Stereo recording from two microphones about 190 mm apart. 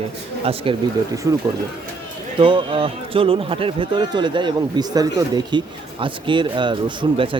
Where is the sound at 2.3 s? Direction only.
25° right (ahead or behind).